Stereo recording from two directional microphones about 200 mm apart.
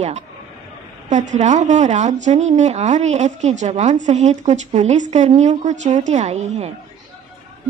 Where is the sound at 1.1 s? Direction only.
35° right (ahead or behind).